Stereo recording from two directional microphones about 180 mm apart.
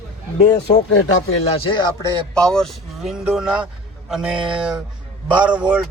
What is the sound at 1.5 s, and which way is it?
Speech, 30° left (ahead or behind).